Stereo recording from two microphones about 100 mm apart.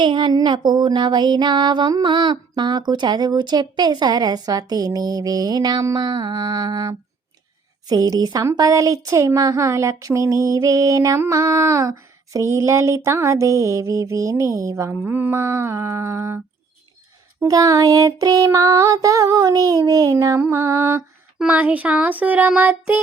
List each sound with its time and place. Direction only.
0.0 s speech: 50° right (ahead or behind); by 16.4 s 25° right (ahead or behind)
17.5 s speech: 35° right (ahead or behind)
20.4 s music: 25° right (ahead or behind)
21.3 s speech: 15° right (ahead or behind)